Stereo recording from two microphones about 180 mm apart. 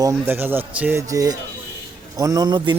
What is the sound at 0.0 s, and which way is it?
Speech, 15° right (ahead or behind).